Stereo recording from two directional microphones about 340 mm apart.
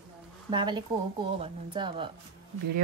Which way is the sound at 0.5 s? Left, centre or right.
Centre.